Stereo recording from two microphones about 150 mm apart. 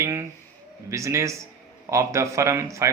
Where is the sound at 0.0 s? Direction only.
20° right (ahead or behind).